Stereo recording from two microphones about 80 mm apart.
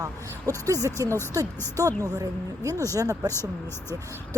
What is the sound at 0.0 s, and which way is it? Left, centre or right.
Speech, right.